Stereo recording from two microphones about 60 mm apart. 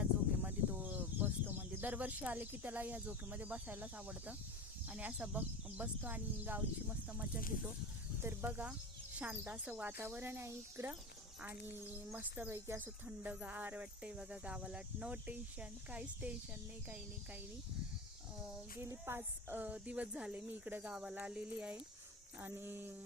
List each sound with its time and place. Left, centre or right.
0.0 s a sound: right
4.9 s speech: right
8.2 s speech: right
12.5 s speech: right
12.8 s speech: right
18.8 s speech: right
19.6 s speech: right
20.3 s speech: right
20.9 s speech: centre
22.4 s speech: right